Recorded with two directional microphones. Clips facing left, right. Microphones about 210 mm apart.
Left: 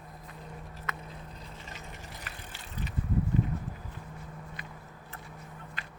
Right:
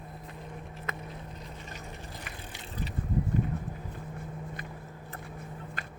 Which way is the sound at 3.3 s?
50° right (ahead or behind).